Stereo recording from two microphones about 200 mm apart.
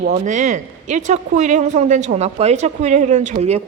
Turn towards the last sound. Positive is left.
turn(degrees=-30)  # may be behind; listen again after turning